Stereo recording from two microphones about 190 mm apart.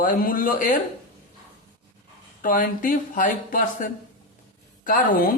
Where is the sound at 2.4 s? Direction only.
45° left (ahead or behind).